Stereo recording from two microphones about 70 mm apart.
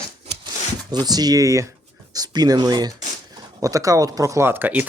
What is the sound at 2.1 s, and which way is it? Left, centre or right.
Speech, right.